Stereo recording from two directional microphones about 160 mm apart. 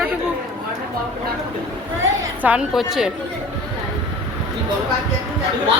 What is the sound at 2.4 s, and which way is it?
Speech, 5° right (ahead or behind).